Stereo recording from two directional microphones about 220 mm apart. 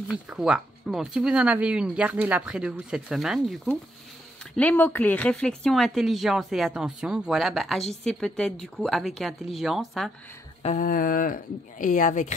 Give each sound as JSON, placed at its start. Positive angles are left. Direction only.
{"t": 0.1, "sound": "speech", "side_deg": 0}
{"t": 10.6, "sound": "speech", "side_deg": 35}